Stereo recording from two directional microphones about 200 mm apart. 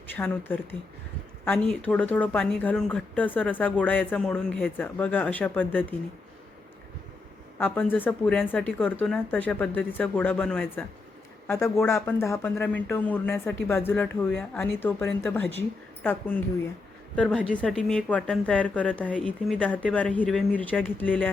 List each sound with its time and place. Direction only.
0.2 s speech: 10° left (ahead or behind)
7.6 s a woman's voice: 10° left (ahead or behind)